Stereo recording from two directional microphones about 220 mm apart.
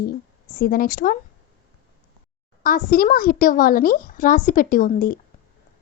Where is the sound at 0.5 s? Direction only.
40° left (ahead or behind).